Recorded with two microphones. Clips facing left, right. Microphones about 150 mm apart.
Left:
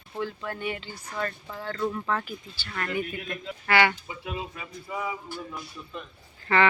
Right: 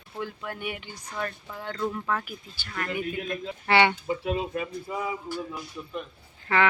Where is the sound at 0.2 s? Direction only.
10° right (ahead or behind).